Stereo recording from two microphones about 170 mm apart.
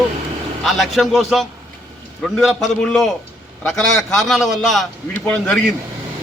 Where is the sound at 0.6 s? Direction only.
Centre (ahead or behind).